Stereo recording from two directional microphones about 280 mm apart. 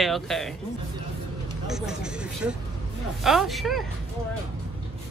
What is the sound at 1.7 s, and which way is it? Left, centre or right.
Speech, centre.